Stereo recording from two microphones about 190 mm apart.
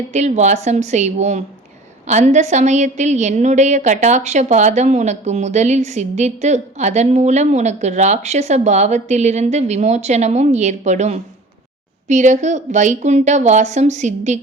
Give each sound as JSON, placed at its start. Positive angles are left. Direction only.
{"t": 0.1, "sound": "a woman's voice", "side_deg": -35}